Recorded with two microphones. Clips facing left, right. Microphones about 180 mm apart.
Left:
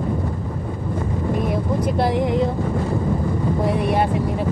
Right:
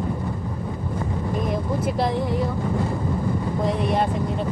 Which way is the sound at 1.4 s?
Centre (ahead or behind).